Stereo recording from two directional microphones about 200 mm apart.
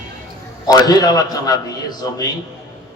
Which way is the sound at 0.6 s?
20° left (ahead or behind).